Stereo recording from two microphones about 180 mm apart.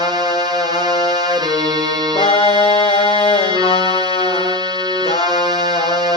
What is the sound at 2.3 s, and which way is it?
Music, 30° left (ahead or behind).